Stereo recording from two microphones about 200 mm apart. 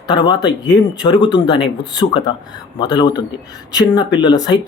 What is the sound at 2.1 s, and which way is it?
Speech, 25° left (ahead or behind).